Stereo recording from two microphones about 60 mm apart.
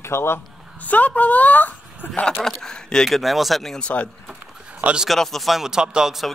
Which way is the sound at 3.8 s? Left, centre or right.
Left.